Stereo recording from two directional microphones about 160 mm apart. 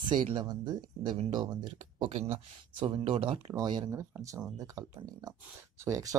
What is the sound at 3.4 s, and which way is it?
Speech, 25° right (ahead or behind).